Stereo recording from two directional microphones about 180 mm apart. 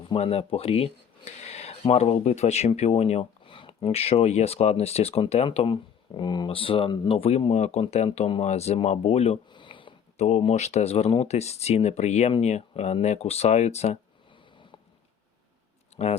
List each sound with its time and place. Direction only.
0.1 s speech: 35° left (ahead or behind)
16.0 s speech: 35° left (ahead or behind)